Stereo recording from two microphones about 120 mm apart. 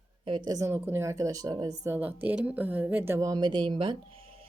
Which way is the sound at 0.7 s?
20° right (ahead or behind).